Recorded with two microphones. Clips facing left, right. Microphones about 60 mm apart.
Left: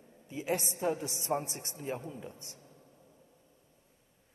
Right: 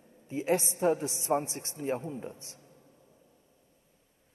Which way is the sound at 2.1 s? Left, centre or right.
Right.